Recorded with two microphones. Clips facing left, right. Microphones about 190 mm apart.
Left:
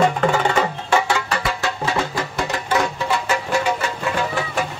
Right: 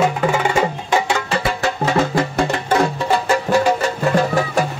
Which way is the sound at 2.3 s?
35° right (ahead or behind).